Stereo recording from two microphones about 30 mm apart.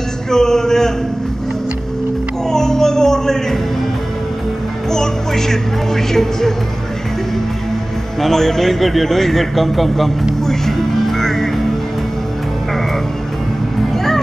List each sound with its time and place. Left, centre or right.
0.3 s a man's voice: centre
2.4 s music: centre
4.8 s a woman's voice: centre
8.2 s a man's voice: centre
10.4 s music: centre
13.9 s music: centre